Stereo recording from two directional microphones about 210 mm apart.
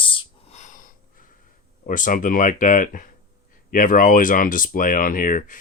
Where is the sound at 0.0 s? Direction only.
30° left (ahead or behind).